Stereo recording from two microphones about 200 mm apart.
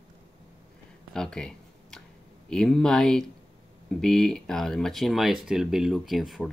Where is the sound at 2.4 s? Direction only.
5° left (ahead or behind).